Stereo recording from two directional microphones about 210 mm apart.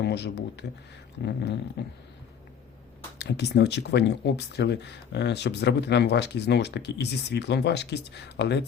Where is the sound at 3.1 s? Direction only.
55° left (ahead or behind).